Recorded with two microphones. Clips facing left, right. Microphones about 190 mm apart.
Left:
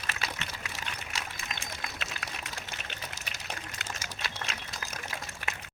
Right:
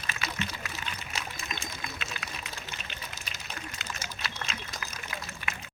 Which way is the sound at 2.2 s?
65° left (ahead or behind).